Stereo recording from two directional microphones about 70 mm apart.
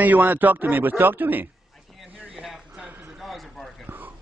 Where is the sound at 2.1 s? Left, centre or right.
Right.